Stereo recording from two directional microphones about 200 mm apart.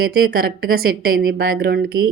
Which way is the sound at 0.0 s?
50° right (ahead or behind).